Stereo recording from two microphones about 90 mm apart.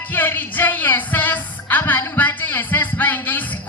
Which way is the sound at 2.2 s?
20° left (ahead or behind).